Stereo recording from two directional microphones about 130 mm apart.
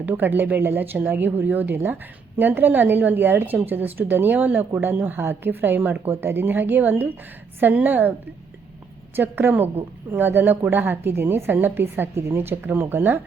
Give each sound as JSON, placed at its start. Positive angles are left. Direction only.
{"t": 0.0, "sound": "a woman's voice", "side_deg": -15}
{"t": 9.1, "sound": "a woman's voice", "side_deg": -15}